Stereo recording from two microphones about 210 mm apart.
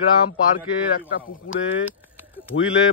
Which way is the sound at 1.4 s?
70° left (ahead or behind).